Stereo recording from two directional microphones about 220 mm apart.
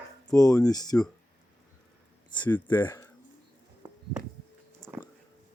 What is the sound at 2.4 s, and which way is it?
Speech, 10° left (ahead or behind).